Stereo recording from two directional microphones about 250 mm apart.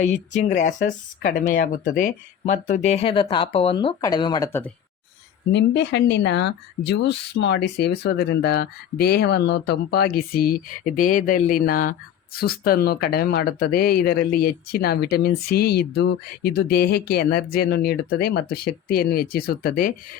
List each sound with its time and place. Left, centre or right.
0.0 s speech: left; by 4.7 s centre
5.5 s speech: left